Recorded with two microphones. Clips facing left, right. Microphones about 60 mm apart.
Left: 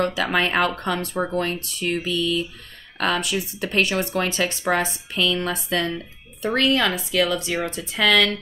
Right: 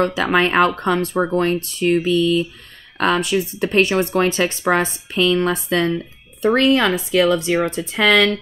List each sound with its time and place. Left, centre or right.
0.0 s speech: right